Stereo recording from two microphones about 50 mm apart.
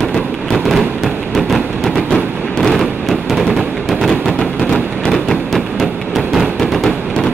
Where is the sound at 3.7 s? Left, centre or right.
Centre.